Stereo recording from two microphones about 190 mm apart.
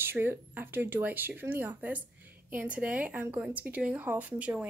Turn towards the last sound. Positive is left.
turn(degrees=-10)  # may be behind; listen again after turning